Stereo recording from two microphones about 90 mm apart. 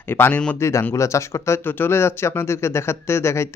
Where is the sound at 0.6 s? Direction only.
30° left (ahead or behind).